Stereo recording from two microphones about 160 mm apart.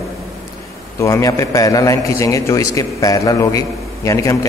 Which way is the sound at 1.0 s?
20° left (ahead or behind).